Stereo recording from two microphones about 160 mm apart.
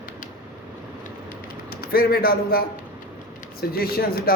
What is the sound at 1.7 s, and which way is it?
A man's voice, 70° left (ahead or behind).